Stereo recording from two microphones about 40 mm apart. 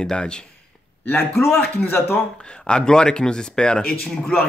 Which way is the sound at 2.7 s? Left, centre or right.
Left.